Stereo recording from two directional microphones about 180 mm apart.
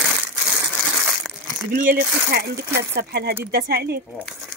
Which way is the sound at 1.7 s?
50° right (ahead or behind).